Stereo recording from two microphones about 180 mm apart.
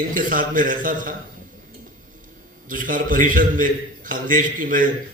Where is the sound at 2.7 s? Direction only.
50° right (ahead or behind).